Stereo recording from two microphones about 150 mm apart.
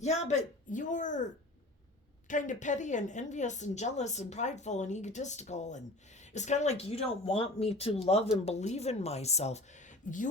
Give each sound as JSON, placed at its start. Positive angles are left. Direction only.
{"t": 0.0, "sound": "speech", "side_deg": 50}
{"t": 2.2, "sound": "a woman's voice", "side_deg": 55}